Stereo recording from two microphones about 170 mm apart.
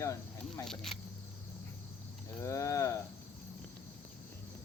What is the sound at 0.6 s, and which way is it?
Speech, centre (ahead or behind).